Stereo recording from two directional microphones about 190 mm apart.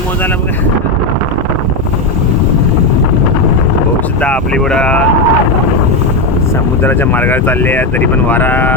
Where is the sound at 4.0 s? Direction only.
5° left (ahead or behind).